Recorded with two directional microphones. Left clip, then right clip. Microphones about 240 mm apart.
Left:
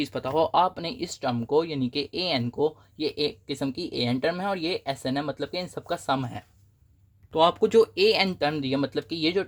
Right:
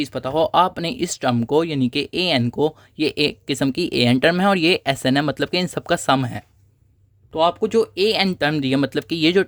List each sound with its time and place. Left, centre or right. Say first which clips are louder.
0.0 s speech: right 5 dB; right
7.3 s speech: right 2 dB; centre; by 9.4 s right